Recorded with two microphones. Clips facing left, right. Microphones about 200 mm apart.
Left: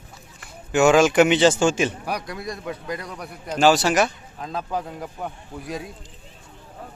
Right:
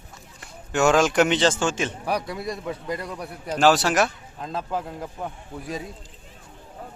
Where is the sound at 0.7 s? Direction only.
Centre (ahead or behind).